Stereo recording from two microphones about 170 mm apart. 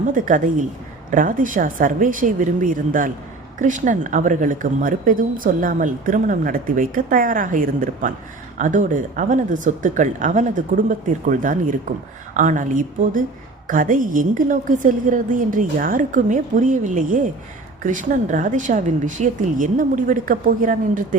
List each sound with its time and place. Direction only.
0.0 s speech: 50° right (ahead or behind)